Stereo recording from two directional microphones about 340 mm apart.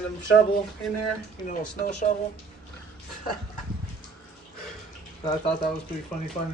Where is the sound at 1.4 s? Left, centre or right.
Left.